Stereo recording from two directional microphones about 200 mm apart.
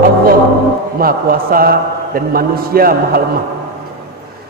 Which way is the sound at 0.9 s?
45° right (ahead or behind).